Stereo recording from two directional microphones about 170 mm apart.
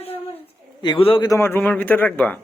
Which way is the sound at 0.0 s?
35° left (ahead or behind).